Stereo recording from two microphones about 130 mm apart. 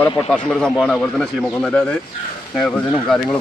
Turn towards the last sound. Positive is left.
turn(degrees=5)  # may be behind; listen again after turning